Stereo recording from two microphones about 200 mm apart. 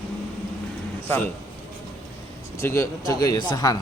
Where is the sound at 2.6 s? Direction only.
15° left (ahead or behind).